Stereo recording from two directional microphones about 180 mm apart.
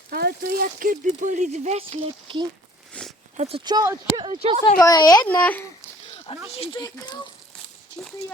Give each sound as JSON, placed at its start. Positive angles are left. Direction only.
{"t": 0.1, "sound": "speech", "side_deg": -60}
{"t": 2.9, "sound": "a sound", "side_deg": 5}
{"t": 3.3, "sound": "speech", "side_deg": -40}
{"t": 3.6, "sound": "speech", "side_deg": -20}
{"t": 4.8, "sound": "speech", "side_deg": 20}
{"t": 5.2, "sound": "speech", "side_deg": 10}
{"t": 6.5, "sound": "speech", "side_deg": 30}